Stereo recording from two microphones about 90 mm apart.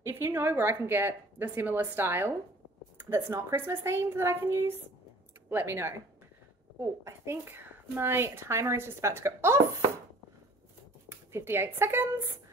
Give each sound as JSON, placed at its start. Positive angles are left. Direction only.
{"t": 0.0, "sound": "speech", "side_deg": -30}
{"t": 11.1, "sound": "speech", "side_deg": -25}